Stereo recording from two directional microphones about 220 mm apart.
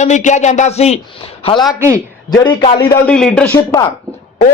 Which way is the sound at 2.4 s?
20° left (ahead or behind).